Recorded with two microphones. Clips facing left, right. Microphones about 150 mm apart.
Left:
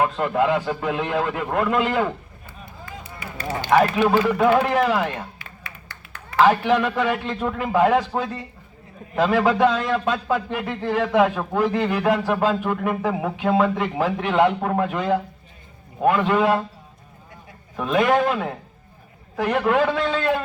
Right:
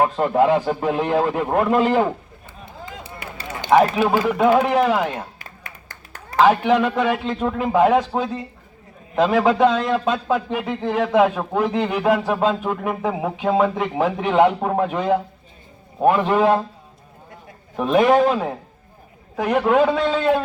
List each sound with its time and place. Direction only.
0.0 s a man's voice: 30° right (ahead or behind)
3.6 s speech: 20° right (ahead or behind)
4.0 s a man's voice: 5° right (ahead or behind)
4.3 s speech: 15° right (ahead or behind)
5.4 s a sound: 45° right (ahead or behind)
6.4 s a man's voice: 20° right (ahead or behind)
17.7 s a man's voice: 20° right (ahead or behind)
19.4 s a man's voice: 20° right (ahead or behind)